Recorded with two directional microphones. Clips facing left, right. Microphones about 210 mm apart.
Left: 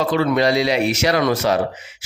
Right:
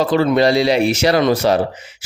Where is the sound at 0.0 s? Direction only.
35° right (ahead or behind).